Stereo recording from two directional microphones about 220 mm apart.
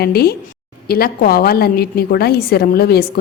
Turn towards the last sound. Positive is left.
turn(degrees=45)  # may be behind; listen again after turning